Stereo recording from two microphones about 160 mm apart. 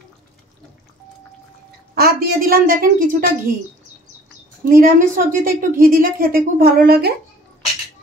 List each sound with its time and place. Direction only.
2.0 s a woman's voice: 70° right (ahead or behind)
4.6 s a woman's voice: 60° right (ahead or behind)